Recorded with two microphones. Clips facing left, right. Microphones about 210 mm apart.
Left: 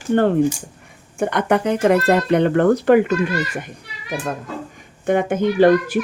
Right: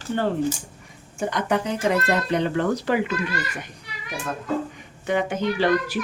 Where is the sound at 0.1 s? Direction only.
60° left (ahead or behind).